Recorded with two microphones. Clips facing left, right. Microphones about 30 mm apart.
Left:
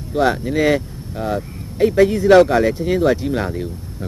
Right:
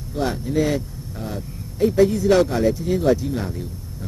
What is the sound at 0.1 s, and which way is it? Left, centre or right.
Speech, left.